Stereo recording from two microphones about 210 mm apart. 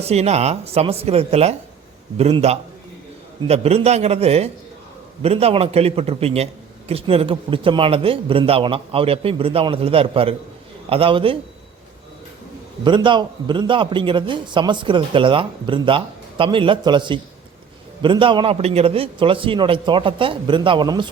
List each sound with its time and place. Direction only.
0.0 s a man's voice: 30° right (ahead or behind)
12.8 s a man's voice: 20° right (ahead or behind)